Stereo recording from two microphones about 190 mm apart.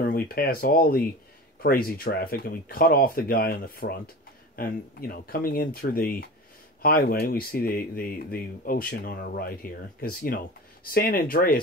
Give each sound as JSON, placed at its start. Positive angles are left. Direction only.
{"t": 0.0, "sound": "speech", "side_deg": 50}